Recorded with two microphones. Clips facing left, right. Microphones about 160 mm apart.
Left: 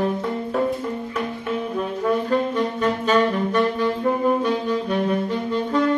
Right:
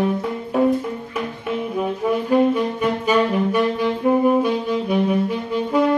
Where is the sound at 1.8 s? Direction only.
10° right (ahead or behind).